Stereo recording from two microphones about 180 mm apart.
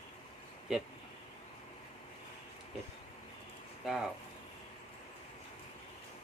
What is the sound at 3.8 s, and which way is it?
Speech, centre (ahead or behind).